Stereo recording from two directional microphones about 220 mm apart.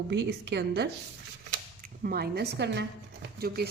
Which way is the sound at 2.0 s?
45° right (ahead or behind).